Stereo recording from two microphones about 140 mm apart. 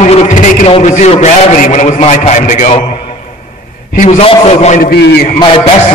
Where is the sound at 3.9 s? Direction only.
60° left (ahead or behind).